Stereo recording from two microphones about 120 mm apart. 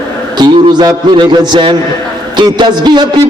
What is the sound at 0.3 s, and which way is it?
A man's voice, 35° right (ahead or behind).